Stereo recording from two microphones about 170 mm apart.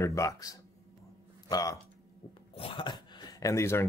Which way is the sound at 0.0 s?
20° left (ahead or behind).